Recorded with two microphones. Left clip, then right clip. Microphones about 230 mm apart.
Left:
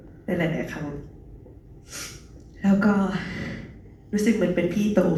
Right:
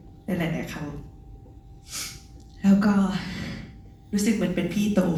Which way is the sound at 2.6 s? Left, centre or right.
Centre.